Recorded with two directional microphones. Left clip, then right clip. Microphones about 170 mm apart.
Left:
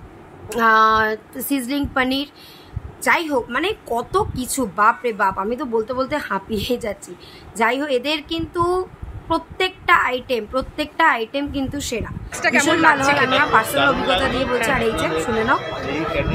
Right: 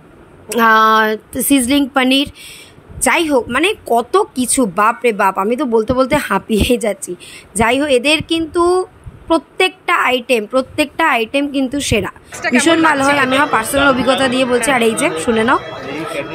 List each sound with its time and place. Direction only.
0.5 s a woman's voice: 45° right (ahead or behind)
12.3 s speech: centre (ahead or behind)